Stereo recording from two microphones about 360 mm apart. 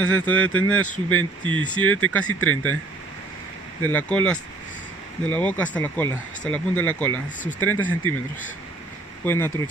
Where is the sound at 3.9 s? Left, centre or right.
Centre.